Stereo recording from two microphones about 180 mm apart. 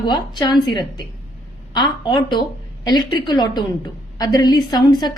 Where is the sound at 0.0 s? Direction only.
25° left (ahead or behind).